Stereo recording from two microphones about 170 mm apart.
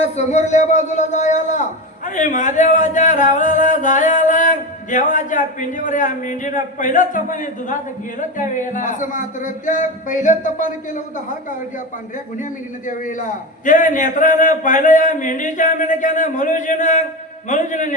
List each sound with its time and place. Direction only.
0.0 s speech: 40° left (ahead or behind)
12.4 s speech: 50° left (ahead or behind)